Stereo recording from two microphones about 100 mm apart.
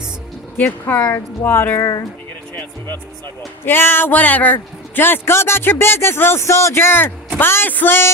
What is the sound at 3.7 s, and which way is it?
Speech, 20° left (ahead or behind).